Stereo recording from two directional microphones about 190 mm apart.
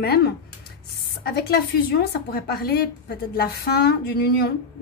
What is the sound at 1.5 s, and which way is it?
A woman's voice, 55° left (ahead or behind).